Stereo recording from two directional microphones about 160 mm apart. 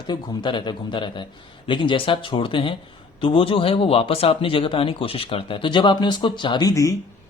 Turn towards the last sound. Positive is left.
turn(degrees=20)  # may be behind; listen again after turning